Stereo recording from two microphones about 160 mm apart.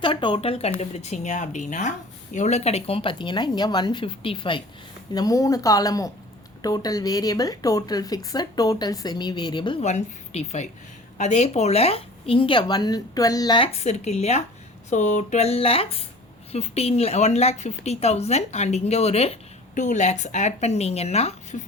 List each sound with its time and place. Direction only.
0.0 s speech: 30° left (ahead or behind)
9.8 s speech: 45° left (ahead or behind); by 13.7 s 25° left (ahead or behind)
13.7 s speech: 45° left (ahead or behind)